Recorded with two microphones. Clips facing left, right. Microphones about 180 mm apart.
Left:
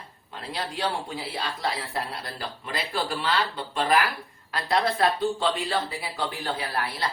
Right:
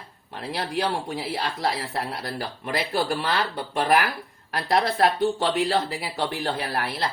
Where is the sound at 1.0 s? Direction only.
70° right (ahead or behind).